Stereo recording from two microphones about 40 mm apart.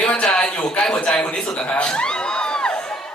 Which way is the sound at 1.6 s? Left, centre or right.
Left.